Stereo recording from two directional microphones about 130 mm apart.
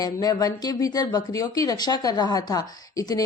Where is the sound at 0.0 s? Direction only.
30° left (ahead or behind).